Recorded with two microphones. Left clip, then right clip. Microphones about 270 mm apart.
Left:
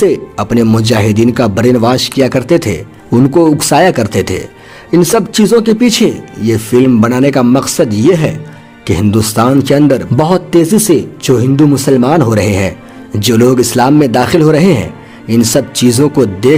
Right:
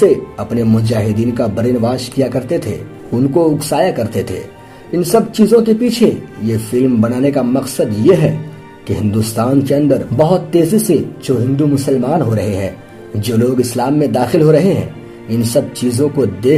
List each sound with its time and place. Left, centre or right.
0.0 s speech: left